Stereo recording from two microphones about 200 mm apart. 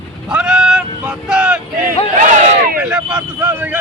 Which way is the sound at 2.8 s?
5° right (ahead or behind).